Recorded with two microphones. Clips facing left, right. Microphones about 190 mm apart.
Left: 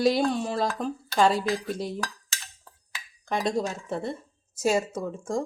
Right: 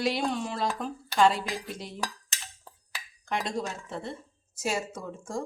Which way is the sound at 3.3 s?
35° left (ahead or behind).